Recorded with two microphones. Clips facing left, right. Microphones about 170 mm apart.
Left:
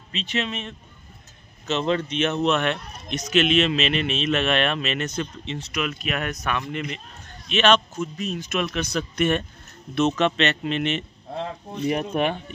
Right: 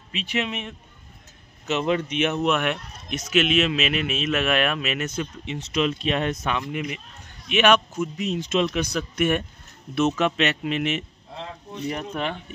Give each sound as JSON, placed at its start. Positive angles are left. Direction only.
{"t": 0.1, "sound": "a man's voice", "side_deg": -10}
{"t": 5.7, "sound": "speech", "side_deg": -30}
{"t": 6.6, "sound": "a man's voice", "side_deg": -10}
{"t": 11.9, "sound": "speech", "side_deg": 20}